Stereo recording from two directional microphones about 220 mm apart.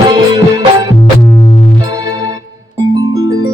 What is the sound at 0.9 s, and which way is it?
Music, 10° left (ahead or behind).